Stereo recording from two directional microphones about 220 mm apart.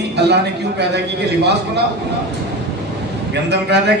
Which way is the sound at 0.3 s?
50° right (ahead or behind).